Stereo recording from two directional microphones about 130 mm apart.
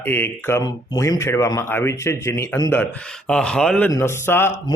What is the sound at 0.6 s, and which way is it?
Speech, 30° left (ahead or behind).